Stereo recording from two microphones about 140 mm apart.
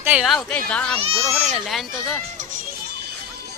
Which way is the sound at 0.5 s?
10° left (ahead or behind).